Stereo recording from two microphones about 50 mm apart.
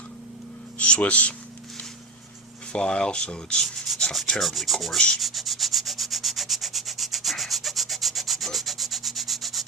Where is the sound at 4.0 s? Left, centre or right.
Centre.